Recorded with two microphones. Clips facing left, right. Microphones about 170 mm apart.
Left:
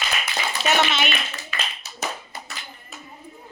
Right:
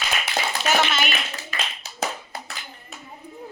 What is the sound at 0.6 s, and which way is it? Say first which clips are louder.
Speech: left 2 dB; centre (ahead or behind).